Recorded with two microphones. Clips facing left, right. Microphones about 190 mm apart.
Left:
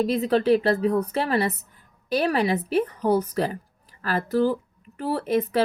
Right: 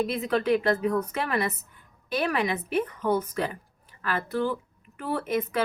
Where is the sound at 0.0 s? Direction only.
35° left (ahead or behind).